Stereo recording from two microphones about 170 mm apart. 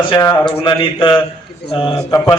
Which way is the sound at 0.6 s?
30° left (ahead or behind).